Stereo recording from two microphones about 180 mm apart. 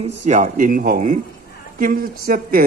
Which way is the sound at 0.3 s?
45° right (ahead or behind).